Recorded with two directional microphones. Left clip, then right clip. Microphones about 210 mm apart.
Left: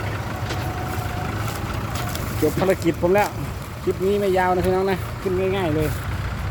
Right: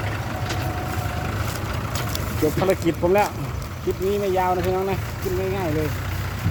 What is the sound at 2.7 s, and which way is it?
Speech, 5° left (ahead or behind).